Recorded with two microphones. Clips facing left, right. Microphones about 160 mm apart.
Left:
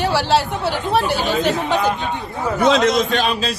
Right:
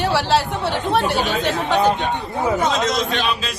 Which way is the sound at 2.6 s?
70° left (ahead or behind).